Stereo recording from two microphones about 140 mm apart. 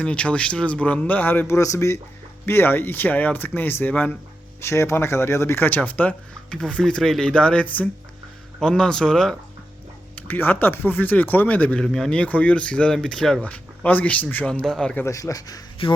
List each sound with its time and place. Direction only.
0.0 s speech: 10° left (ahead or behind)
15.0 s speech: 25° left (ahead or behind)